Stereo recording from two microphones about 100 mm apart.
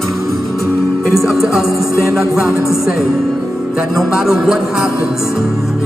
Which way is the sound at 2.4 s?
25° left (ahead or behind).